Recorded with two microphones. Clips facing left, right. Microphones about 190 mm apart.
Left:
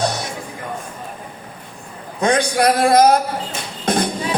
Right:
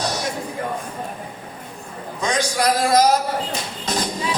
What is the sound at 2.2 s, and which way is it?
Speech, 55° left (ahead or behind).